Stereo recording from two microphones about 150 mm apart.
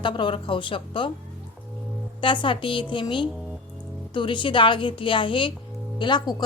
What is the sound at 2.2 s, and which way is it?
A woman's voice, 35° left (ahead or behind).